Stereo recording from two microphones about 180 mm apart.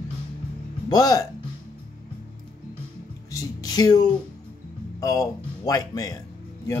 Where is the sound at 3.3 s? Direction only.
20° left (ahead or behind).